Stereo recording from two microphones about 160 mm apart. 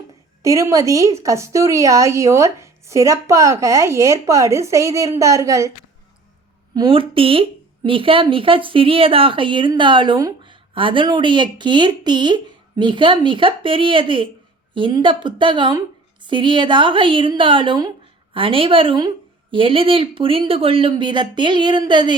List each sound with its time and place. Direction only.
0.4 s speech: 20° right (ahead or behind)
6.7 s a woman's voice: 35° right (ahead or behind)